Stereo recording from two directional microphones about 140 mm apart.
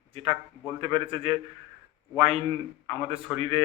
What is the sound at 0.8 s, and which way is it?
Speech, 40° right (ahead or behind).